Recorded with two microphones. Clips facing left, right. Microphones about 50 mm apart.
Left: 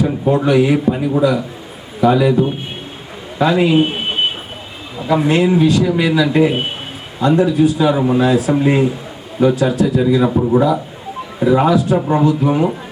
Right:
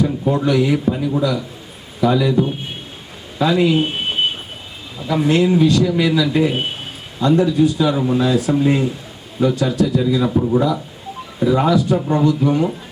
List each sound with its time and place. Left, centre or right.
0.4 s a man's voice: left
4.9 s a man's voice: left